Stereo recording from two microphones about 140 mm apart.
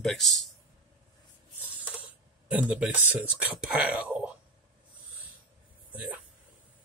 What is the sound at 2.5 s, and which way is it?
Speech, 10° right (ahead or behind).